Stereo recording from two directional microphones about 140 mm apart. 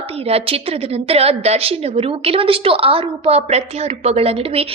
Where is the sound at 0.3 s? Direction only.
45° right (ahead or behind).